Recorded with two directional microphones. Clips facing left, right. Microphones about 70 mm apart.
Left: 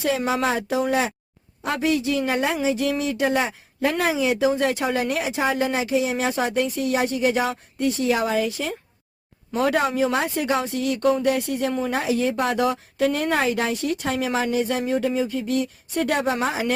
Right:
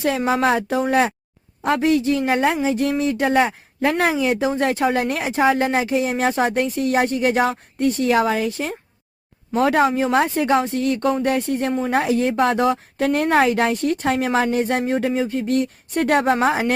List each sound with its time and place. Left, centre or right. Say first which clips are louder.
0.3 s speech: right 4 dB; right